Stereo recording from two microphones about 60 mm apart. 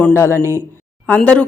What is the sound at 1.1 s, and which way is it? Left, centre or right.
Speech, left.